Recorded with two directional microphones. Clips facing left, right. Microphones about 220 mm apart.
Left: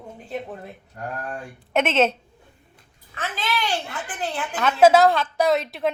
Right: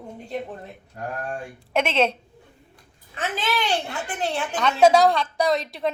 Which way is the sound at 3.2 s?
20° right (ahead or behind).